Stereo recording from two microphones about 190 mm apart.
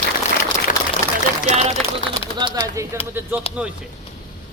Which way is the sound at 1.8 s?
Centre (ahead or behind).